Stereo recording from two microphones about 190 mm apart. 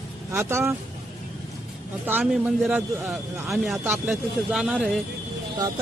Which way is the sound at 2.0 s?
5° right (ahead or behind).